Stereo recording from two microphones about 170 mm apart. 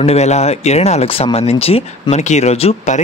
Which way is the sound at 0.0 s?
40° left (ahead or behind).